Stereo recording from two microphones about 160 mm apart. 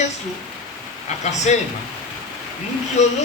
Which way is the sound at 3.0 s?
45° left (ahead or behind).